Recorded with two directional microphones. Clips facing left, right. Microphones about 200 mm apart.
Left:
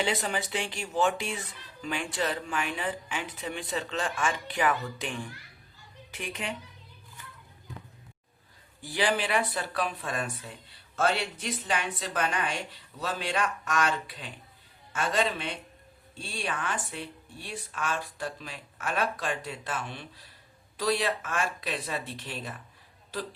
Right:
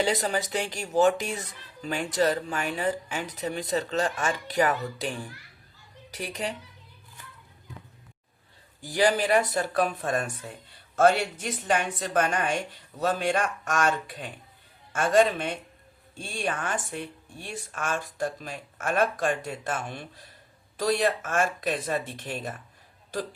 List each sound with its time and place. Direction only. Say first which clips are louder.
0.0 s speech: right 4 dB; 40° right (ahead or behind)
8.8 s speech: right 5 dB; 40° right (ahead or behind)